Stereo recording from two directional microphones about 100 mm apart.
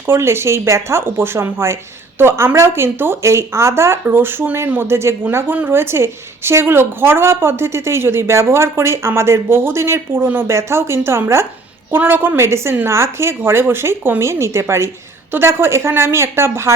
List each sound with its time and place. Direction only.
0.1 s speech: 25° right (ahead or behind)